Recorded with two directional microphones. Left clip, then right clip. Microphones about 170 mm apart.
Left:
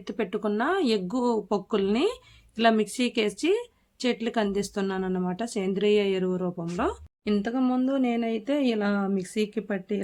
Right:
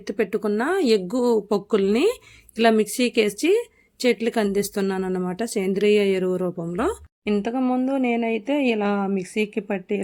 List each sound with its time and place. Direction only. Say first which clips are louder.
0.0 s a woman's voice: right 5 dB; 20° right (ahead or behind)